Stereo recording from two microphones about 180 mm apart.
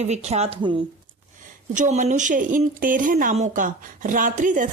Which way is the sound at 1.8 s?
40° right (ahead or behind).